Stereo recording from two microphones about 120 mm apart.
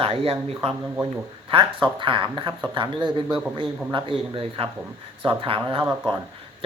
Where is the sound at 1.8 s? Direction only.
45° right (ahead or behind).